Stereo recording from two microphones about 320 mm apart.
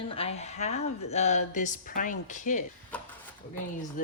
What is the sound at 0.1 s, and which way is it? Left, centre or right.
Speech, centre.